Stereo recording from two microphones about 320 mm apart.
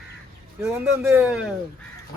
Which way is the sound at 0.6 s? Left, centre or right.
Centre.